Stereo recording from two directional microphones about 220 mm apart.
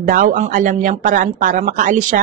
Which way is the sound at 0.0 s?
40° right (ahead or behind).